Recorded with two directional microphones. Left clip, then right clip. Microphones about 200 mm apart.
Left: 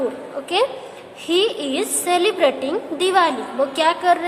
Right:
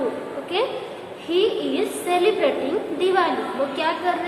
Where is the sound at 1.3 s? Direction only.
50° left (ahead or behind).